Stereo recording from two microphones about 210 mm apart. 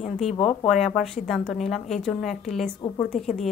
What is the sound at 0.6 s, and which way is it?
A woman's voice, centre (ahead or behind).